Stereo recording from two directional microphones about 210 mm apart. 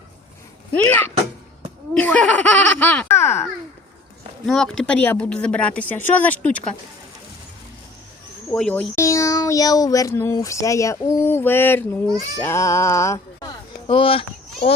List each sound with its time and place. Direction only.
0.7 s speech: 10° left (ahead or behind)
4.4 s speech: centre (ahead or behind)
8.4 s speech: 5° left (ahead or behind)
13.8 s a child's voice: 25° left (ahead or behind)